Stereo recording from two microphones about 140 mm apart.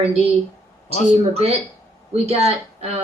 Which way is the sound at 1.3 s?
45° right (ahead or behind).